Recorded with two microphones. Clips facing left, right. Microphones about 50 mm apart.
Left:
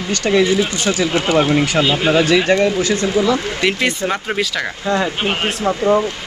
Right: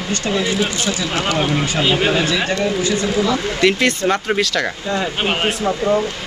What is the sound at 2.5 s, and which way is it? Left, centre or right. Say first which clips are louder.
Speech: left 6 dB; left.